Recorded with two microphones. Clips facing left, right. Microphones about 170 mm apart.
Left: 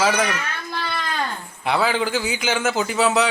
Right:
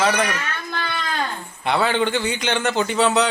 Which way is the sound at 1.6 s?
Centre (ahead or behind).